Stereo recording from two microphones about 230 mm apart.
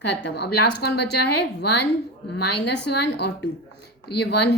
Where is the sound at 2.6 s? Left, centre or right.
Left.